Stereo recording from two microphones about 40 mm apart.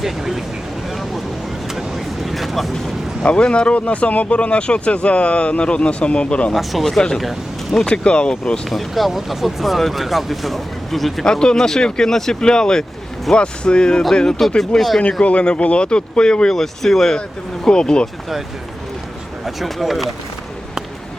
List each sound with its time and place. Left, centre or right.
0.0 s speech: centre
2.2 s speech: centre
3.4 s speech: left
6.5 s speech: centre
7.9 s speech: left
8.7 s speech: centre
11.3 s speech: centre
14.2 s speech: centre
15.2 s speech: left; by 17.2 s centre
17.7 s speech: left
19.5 s speech: centre